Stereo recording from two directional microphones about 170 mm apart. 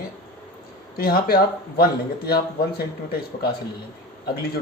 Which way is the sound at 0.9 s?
65° left (ahead or behind).